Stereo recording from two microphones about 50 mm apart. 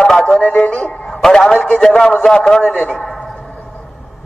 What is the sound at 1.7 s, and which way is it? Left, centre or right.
A man's voice, centre.